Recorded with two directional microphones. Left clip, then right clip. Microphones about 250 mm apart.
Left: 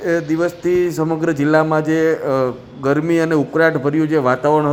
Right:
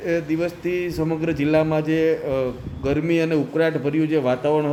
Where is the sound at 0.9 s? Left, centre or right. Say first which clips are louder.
Left 5 dB; centre.